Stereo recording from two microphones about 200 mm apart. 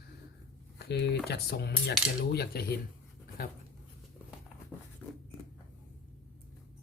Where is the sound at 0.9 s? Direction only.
55° left (ahead or behind).